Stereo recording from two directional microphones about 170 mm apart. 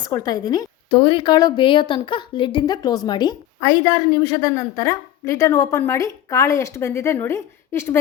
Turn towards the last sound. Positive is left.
turn(degrees=15)  # may be behind; listen again after turning